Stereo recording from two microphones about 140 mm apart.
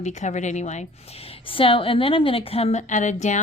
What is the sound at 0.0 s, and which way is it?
A woman's voice, 55° left (ahead or behind).